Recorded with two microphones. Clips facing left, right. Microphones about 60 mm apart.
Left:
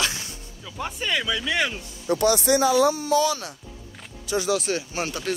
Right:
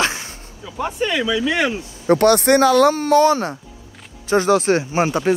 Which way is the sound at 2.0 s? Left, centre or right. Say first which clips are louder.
Right 7 dB; right.